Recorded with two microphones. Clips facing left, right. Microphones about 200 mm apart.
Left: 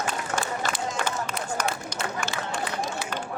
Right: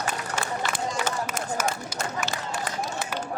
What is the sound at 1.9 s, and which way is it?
Run, 5° right (ahead or behind).